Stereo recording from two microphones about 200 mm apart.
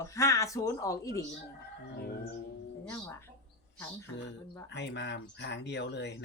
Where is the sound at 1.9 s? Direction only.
50° left (ahead or behind).